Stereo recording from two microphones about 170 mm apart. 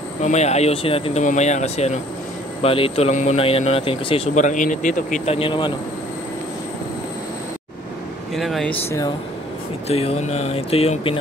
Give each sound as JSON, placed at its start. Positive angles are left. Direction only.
{"t": 0.2, "sound": "speech", "side_deg": 40}
{"t": 1.2, "sound": "speech", "side_deg": 45}
{"t": 4.5, "sound": "a man's voice", "side_deg": 50}
{"t": 8.4, "sound": "speech", "side_deg": 0}
{"t": 9.8, "sound": "speech", "side_deg": 40}